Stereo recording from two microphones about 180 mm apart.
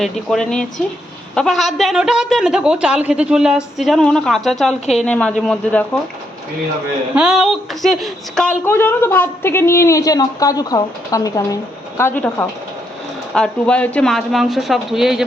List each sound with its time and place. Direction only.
0.0 s a woman's voice: 5° left (ahead or behind)
7.2 s speech: 5° right (ahead or behind)
8.6 s a woman's voice: 10° left (ahead or behind)